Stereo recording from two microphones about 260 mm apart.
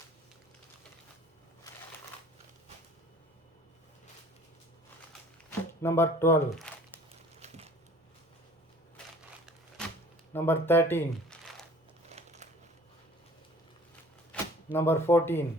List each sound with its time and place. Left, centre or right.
5.5 s speech: centre
7.3 s a sound: right
9.8 s typewriter: centre
10.3 s speech: centre
12.0 s crumpling: right
14.3 s a sound: centre
14.7 s speech: centre